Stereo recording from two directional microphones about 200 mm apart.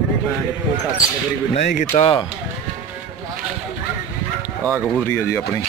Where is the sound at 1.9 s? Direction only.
30° left (ahead or behind).